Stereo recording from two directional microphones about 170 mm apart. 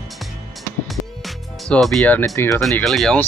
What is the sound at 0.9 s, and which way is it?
Music, centre (ahead or behind).